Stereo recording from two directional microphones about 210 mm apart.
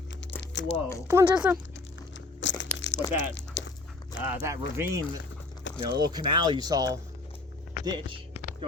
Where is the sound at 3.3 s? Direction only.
60° left (ahead or behind).